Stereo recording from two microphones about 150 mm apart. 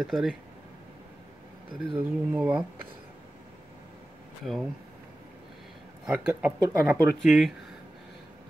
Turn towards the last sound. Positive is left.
turn(degrees=0)  # may be behind; listen again after turning